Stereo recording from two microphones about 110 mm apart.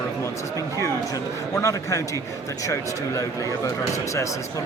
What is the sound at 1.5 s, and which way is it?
Speech, 30° left (ahead or behind).